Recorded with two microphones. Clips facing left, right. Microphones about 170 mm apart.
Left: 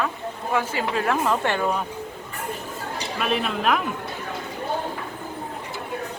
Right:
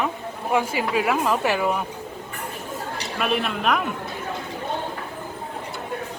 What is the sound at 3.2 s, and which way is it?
Speech, centre (ahead or behind).